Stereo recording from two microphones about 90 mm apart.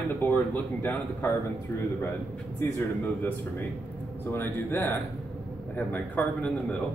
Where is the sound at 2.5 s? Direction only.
25° left (ahead or behind).